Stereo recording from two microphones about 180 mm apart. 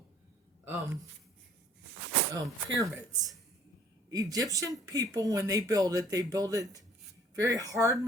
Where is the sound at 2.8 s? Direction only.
20° right (ahead or behind).